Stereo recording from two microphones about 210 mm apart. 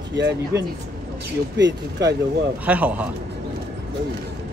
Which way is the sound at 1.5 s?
55° right (ahead or behind).